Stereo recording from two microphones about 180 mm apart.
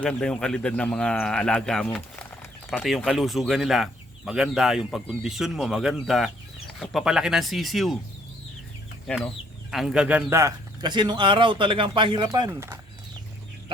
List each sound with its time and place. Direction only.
0.0 s speech: 5° left (ahead or behind)
9.0 s speech: 5° left (ahead or behind); by 12.5 s 25° right (ahead or behind)
12.5 s speech: 15° right (ahead or behind)